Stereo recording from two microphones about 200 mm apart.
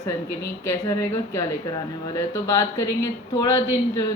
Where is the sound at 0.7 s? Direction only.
15° left (ahead or behind).